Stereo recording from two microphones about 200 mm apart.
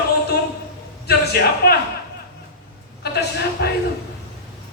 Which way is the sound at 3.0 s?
55° left (ahead or behind).